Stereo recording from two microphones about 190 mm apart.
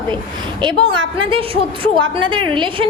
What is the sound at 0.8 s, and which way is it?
A woman's voice, 25° right (ahead or behind).